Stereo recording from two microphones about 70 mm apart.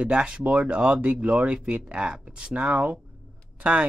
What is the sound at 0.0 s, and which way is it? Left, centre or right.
Speech, centre.